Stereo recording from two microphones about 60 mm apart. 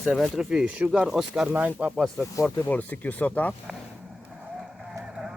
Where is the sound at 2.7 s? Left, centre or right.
Left.